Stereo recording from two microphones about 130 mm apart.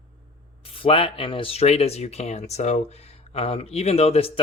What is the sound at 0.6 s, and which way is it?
Speech, 45° left (ahead or behind).